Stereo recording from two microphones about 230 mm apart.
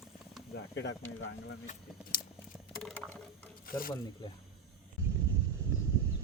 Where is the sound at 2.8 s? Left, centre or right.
Centre.